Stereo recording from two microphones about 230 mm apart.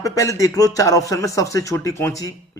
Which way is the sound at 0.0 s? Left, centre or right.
Centre.